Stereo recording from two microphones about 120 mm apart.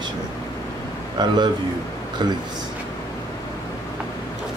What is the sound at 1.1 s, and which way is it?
Speech, 35° right (ahead or behind).